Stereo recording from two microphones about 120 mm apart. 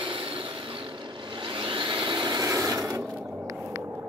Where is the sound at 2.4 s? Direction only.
30° right (ahead or behind).